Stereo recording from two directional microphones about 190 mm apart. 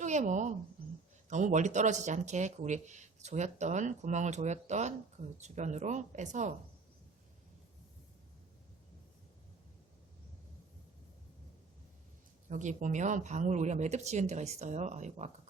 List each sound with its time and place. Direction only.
0.0 s a woman's voice: 40° right (ahead or behind)
12.5 s speech: 40° right (ahead or behind)